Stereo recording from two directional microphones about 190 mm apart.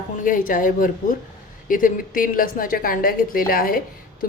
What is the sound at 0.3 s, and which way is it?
A woman's voice, 45° left (ahead or behind).